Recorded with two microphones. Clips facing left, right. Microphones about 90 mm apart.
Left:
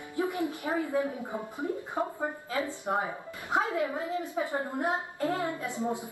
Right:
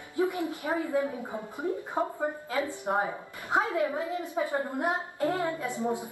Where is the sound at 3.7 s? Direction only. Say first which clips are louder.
Right 2 dB; 20° left (ahead or behind).